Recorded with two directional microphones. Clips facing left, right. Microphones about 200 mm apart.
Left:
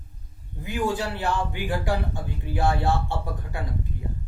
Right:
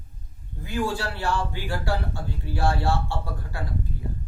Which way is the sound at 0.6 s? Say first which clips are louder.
Left 1 dB; 15° left (ahead or behind).